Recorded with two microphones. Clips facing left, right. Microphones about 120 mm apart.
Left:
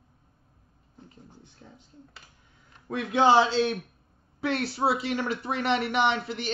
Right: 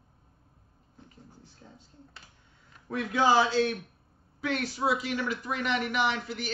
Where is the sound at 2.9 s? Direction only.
25° left (ahead or behind).